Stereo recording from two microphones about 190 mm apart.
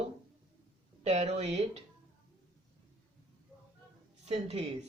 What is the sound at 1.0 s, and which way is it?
Speech, 35° right (ahead or behind).